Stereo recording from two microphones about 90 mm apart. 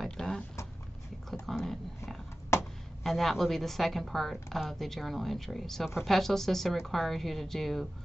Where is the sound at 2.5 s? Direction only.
30° left (ahead or behind).